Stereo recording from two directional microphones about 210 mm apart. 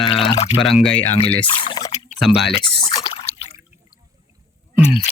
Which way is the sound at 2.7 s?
25° left (ahead or behind).